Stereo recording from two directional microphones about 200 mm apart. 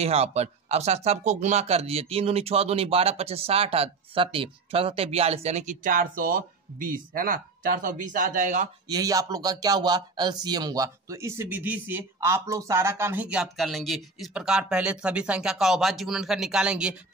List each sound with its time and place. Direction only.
0.0 s speech: 30° right (ahead or behind)
8.8 s speech: 20° right (ahead or behind)